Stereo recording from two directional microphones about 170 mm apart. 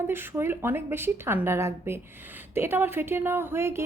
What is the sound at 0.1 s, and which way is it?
A woman's voice, 15° right (ahead or behind).